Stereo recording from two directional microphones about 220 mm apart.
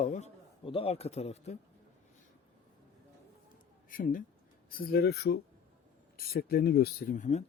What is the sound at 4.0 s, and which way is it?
Speech, 40° left (ahead or behind).